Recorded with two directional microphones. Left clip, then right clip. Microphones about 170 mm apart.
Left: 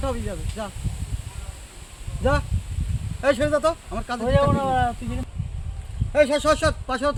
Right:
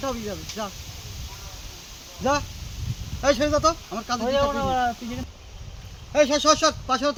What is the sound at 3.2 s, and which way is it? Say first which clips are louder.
Speech: even; 20° left (ahead or behind).